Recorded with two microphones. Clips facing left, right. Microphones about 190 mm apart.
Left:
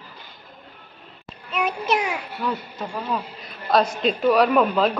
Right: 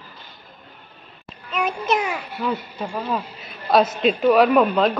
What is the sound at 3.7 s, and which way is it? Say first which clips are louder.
A man's voice: right 3 dB; 5° right (ahead or behind).